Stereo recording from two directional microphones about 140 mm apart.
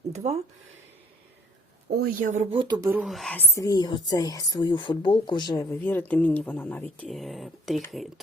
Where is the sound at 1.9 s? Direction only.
70° right (ahead or behind).